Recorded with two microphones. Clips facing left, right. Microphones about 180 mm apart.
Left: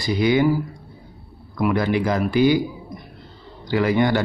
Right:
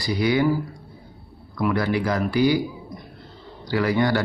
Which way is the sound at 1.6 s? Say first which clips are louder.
Left 2 dB; 20° left (ahead or behind).